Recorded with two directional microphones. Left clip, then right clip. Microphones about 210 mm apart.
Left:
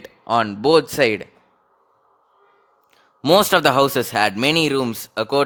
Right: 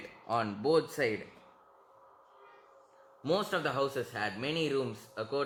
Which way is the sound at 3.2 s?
50° left (ahead or behind).